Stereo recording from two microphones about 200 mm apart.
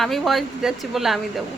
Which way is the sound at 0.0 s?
Centre (ahead or behind).